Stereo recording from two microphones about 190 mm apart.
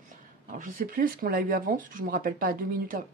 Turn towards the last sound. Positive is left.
turn(degrees=-50)  # may be behind; listen again after turning